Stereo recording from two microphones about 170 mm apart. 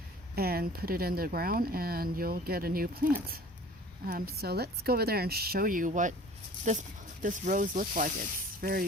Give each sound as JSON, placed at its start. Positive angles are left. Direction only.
{"t": 0.3, "sound": "speech", "side_deg": -65}